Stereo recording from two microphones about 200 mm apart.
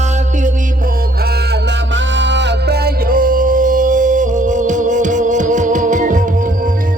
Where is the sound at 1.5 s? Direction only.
65° right (ahead or behind); by 6.7 s 40° right (ahead or behind).